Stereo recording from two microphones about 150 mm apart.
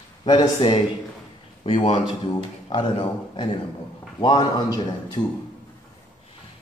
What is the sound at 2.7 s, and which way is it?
A man's voice, 30° left (ahead or behind).